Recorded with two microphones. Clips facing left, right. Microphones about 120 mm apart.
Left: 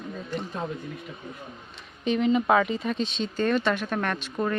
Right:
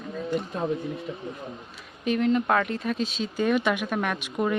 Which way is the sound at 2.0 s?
Centre (ahead or behind).